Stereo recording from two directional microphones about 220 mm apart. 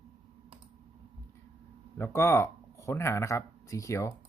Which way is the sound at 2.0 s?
10° left (ahead or behind).